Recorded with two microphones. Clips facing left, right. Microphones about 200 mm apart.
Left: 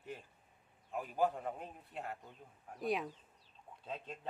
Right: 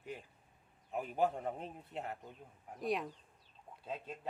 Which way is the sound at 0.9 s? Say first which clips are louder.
Right 1 dB; 25° right (ahead or behind).